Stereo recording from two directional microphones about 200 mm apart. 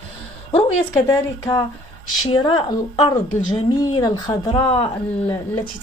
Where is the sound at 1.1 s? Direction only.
15° left (ahead or behind).